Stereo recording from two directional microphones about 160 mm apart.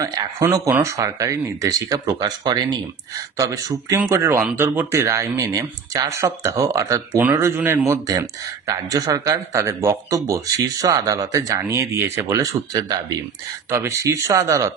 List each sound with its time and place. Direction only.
0.0 s speech: 20° right (ahead or behind)